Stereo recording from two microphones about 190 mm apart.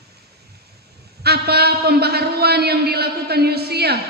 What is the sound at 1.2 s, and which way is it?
A man's voice, 55° right (ahead or behind).